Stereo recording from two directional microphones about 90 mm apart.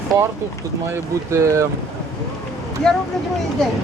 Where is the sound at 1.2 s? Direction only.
35° right (ahead or behind).